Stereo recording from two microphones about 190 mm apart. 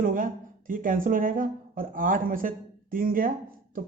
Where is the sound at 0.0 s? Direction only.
45° right (ahead or behind).